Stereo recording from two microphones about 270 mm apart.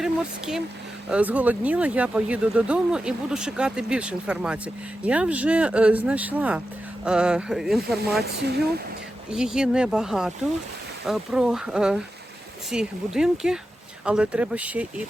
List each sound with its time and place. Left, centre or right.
0.0 s speech: centre
8.2 s speech: right
9.3 s speech: centre